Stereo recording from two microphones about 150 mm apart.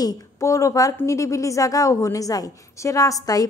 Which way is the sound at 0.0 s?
20° left (ahead or behind).